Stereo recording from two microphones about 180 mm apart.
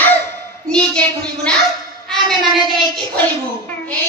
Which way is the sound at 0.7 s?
5° left (ahead or behind).